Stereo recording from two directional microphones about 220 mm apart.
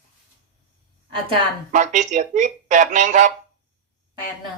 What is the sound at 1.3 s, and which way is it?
Speech, 35° right (ahead or behind).